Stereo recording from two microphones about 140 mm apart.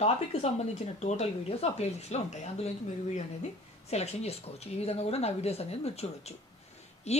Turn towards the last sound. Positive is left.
turn(degrees=50)  # may be behind; listen again after turning